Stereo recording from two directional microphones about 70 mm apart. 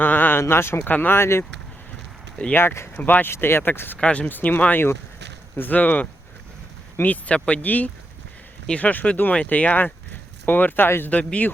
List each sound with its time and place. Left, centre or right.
0.0 s a sound: left
0.9 s speech: left
2.6 s speech: left
2.9 s speech: left
3.9 s speech: centre
4.3 s speech: left
11.1 s speech: centre